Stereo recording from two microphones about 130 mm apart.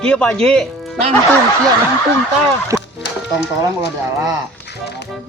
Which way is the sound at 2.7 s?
25° right (ahead or behind).